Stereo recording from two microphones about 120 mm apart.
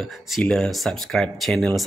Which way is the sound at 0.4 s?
5° left (ahead or behind).